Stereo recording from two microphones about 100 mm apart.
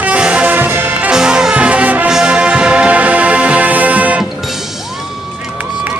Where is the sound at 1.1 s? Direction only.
5° right (ahead or behind).